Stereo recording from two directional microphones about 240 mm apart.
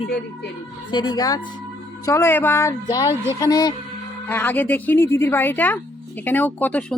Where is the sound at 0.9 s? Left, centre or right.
Centre.